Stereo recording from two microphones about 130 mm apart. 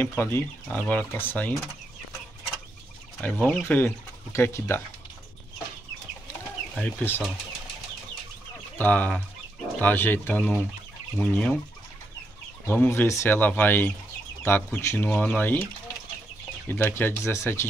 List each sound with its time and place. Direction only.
0.0 s speech: 15° left (ahead or behind)
3.2 s speech: 10° left (ahead or behind)
6.8 s speech: 15° left (ahead or behind)
8.7 s speech: 15° left (ahead or behind)
12.6 s speech: 15° left (ahead or behind)
16.6 s speech: 15° left (ahead or behind)